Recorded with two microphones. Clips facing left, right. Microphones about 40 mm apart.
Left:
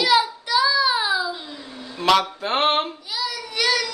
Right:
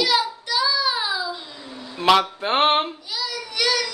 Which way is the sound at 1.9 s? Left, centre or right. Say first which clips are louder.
Right 1 dB; centre.